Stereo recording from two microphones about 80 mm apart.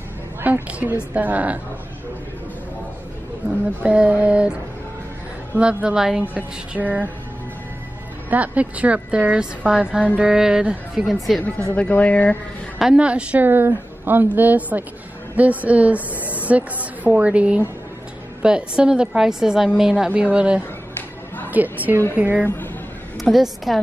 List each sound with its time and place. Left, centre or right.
0.4 s a woman's voice: centre
3.8 s a woman's voice: centre
5.6 s a woman's voice: centre
6.3 s a woman's voice: right
8.3 s a woman's voice: centre
11.1 s a woman's voice: centre
11.7 s speech: centre
12.7 s a woman's voice: centre
13.5 s a woman's voice: right
16.2 s a sound: left
17.0 s a woman's voice: centre
22.4 s speech: left
23.3 s a woman's voice: centre